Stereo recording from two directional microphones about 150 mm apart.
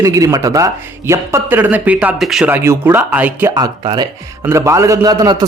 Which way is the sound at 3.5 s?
30° right (ahead or behind).